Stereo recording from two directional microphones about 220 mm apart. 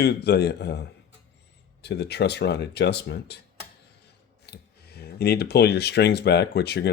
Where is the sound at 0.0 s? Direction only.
50° left (ahead or behind).